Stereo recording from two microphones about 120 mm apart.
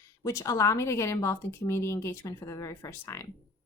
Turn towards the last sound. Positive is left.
turn(degrees=20)  # may be behind; listen again after turning